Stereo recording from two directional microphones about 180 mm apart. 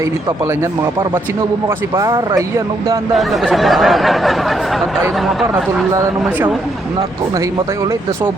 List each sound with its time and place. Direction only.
1.6 s speech: 20° right (ahead or behind)
3.2 s speech: centre (ahead or behind)
5.9 s speech: 15° right (ahead or behind)